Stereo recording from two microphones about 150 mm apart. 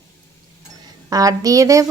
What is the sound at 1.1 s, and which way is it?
Stir, 25° right (ahead or behind).